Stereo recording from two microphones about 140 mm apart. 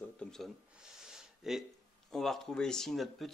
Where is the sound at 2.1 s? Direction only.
Centre (ahead or behind).